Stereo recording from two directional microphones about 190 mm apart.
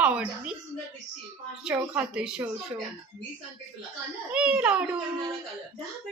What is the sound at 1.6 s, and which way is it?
Speech, 5° right (ahead or behind).